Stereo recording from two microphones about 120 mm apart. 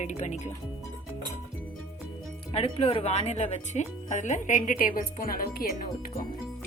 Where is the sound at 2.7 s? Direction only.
55° left (ahead or behind); by 5.2 s 90° left.